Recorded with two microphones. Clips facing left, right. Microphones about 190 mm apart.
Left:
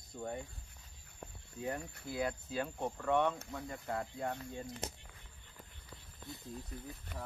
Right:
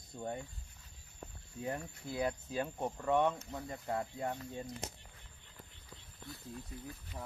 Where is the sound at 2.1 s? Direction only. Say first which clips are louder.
Right 1 dB; 20° right (ahead or behind).